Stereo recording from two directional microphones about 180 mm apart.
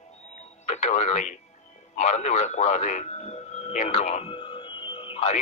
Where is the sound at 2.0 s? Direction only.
40° left (ahead or behind).